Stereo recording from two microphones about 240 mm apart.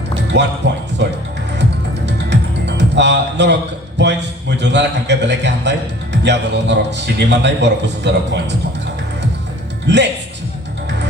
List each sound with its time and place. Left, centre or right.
0.3 s a man's voice: right
2.0 s a man's voice: right
9.8 s speech: right